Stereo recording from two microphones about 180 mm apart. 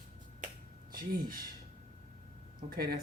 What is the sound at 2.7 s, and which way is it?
Speech, 55° right (ahead or behind).